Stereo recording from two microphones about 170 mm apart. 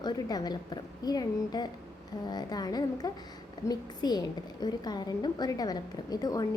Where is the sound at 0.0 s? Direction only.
25° left (ahead or behind).